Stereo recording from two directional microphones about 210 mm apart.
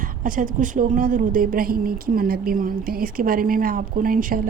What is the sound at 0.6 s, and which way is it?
A woman's voice, 40° right (ahead or behind).